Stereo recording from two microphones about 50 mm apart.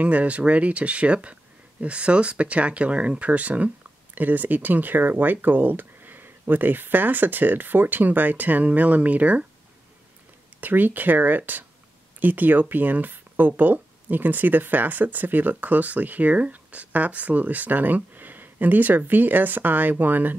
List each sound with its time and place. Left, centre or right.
0.0 s speech: right
10.6 s speech: right